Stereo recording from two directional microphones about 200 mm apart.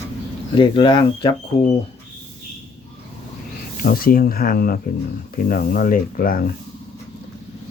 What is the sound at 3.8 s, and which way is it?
Speech, 50° left (ahead or behind).